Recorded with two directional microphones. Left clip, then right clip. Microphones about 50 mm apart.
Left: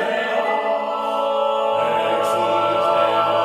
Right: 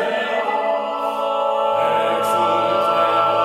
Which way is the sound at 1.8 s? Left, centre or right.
Right.